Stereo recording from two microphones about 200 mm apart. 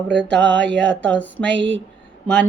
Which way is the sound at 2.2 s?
5° left (ahead or behind).